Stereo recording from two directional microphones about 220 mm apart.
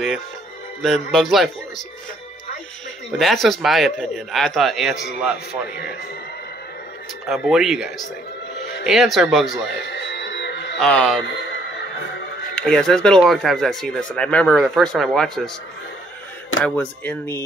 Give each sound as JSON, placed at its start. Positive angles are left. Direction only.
{"t": 0.8, "sound": "speech", "side_deg": 0}
{"t": 3.2, "sound": "speech", "side_deg": 0}
{"t": 7.2, "sound": "speech", "side_deg": 0}
{"t": 9.8, "sound": "music", "side_deg": 50}
{"t": 10.8, "sound": "speech", "side_deg": 0}
{"t": 12.5, "sound": "speech", "side_deg": 5}
{"t": 16.6, "sound": "speech", "side_deg": 5}